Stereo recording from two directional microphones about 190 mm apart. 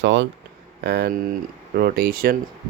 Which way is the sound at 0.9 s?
55° right (ahead or behind).